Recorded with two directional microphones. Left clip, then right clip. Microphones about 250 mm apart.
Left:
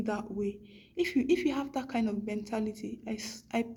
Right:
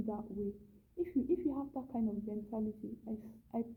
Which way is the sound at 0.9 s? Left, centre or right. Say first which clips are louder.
Left 7 dB; centre.